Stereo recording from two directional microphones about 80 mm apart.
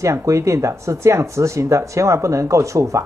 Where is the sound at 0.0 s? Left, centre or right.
Right.